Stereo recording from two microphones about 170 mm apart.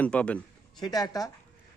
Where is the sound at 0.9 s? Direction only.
20° left (ahead or behind).